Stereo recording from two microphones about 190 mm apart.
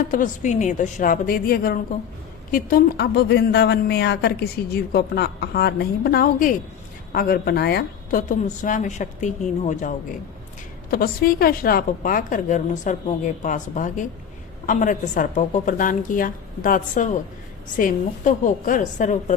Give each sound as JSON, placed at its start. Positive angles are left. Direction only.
{"t": 0.0, "sound": "a woman's voice", "side_deg": 45}
{"t": 10.9, "sound": "a woman's voice", "side_deg": 50}